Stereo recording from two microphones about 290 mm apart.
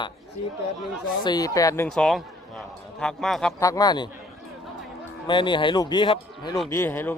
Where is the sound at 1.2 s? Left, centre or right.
Centre.